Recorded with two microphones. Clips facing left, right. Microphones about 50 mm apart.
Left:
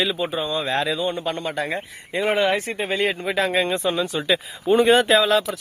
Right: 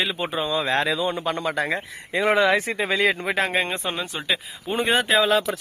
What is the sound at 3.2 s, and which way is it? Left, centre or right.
Speech, right.